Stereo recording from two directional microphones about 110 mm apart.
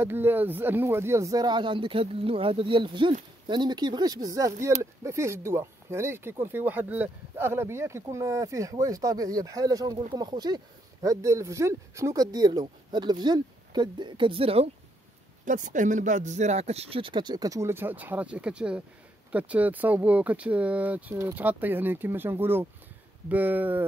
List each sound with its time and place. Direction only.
0.0 s speech: 20° right (ahead or behind); by 14.7 s 60° right (ahead or behind)
16.1 s speech: 90° right; by 23.9 s 15° right (ahead or behind)